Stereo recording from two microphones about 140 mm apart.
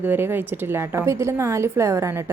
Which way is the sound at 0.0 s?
15° right (ahead or behind).